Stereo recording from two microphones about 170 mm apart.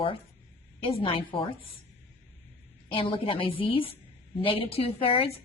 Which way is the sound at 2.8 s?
30° left (ahead or behind).